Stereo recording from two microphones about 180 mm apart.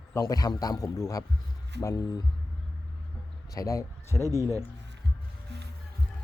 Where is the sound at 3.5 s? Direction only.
20° left (ahead or behind).